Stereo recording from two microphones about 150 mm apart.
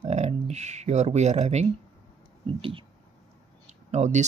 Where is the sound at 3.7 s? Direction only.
50° right (ahead or behind).